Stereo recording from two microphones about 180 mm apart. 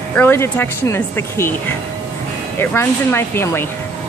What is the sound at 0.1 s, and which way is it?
Speech, 10° left (ahead or behind).